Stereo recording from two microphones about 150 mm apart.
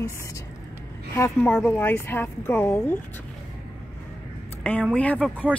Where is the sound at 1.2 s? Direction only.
10° left (ahead or behind).